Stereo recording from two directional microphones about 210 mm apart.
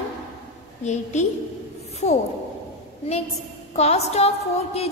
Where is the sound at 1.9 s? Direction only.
30° left (ahead or behind).